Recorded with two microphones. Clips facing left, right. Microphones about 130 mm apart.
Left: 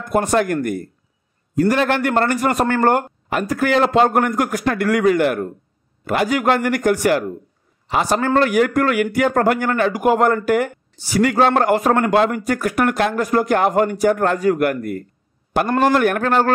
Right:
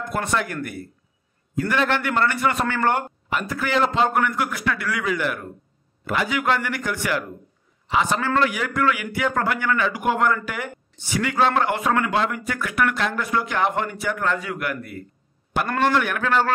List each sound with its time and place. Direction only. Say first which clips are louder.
0.1 s a man's voice: left 9 dB; 45° left (ahead or behind)